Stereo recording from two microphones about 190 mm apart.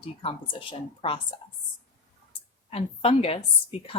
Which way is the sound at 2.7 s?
30° left (ahead or behind).